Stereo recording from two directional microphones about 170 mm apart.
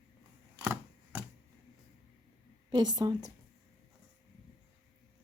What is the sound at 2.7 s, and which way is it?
Speech, 25° right (ahead or behind).